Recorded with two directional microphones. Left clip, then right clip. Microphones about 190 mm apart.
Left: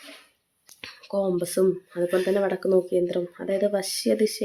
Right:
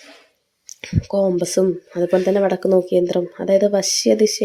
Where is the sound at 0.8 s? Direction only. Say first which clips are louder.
Right 8 dB; 10° right (ahead or behind).